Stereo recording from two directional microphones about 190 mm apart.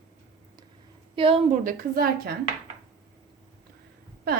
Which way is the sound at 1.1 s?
30° right (ahead or behind).